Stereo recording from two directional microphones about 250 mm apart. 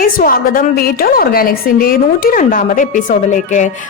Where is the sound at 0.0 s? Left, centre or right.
Left.